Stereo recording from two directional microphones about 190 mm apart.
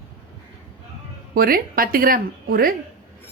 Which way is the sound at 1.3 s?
50° right (ahead or behind).